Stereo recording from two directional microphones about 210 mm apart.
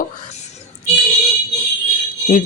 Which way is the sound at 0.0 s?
30° left (ahead or behind).